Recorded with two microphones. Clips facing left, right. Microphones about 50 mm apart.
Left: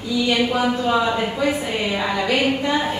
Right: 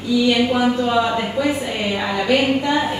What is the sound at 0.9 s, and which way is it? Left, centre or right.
A woman's voice, centre.